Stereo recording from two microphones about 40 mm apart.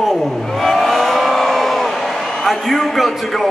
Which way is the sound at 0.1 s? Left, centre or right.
Centre.